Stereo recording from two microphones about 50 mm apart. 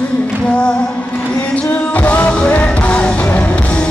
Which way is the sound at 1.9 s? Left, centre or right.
Left.